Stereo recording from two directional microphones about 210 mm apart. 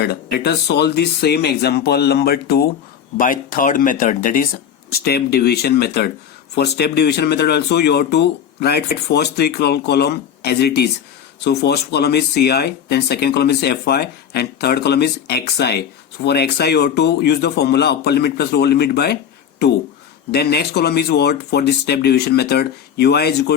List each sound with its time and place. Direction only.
0.0 s speech: 50° left (ahead or behind)